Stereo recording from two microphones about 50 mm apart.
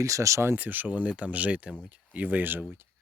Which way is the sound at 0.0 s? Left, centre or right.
Right.